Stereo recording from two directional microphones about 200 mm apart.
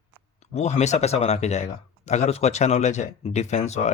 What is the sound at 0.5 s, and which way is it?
A man's voice, 35° left (ahead or behind).